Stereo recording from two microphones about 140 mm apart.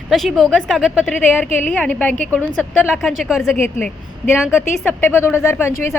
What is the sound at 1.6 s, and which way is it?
Speech, 10° left (ahead or behind).